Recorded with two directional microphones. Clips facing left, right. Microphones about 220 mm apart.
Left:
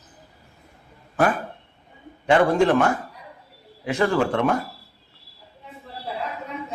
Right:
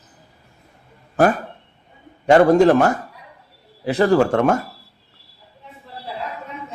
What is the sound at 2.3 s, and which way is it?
Speech, 40° right (ahead or behind).